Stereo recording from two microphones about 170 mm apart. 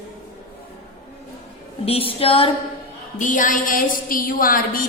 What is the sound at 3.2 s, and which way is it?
A woman's voice, 50° left (ahead or behind).